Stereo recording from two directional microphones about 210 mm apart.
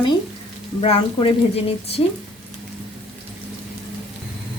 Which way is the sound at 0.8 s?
25° left (ahead or behind).